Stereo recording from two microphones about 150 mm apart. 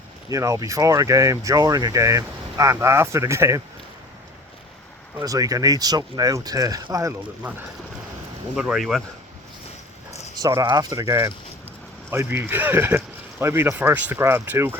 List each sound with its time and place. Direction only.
0.3 s speech: 20° right (ahead or behind)
5.2 s speech: 25° right (ahead or behind)
8.5 s speech: centre (ahead or behind)
10.4 s speech: 25° right (ahead or behind)